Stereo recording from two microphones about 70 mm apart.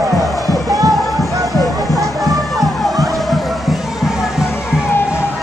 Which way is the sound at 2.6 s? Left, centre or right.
Centre.